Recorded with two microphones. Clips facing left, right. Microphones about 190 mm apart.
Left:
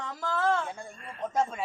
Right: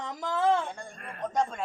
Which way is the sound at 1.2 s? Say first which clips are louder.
Even; 5° left (ahead or behind).